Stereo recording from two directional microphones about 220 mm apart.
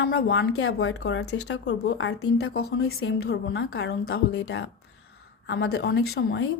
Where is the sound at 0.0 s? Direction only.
50° left (ahead or behind).